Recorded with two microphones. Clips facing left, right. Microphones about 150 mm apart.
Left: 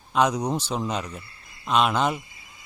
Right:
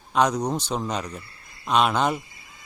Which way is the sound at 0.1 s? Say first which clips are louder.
Even; 5° left (ahead or behind).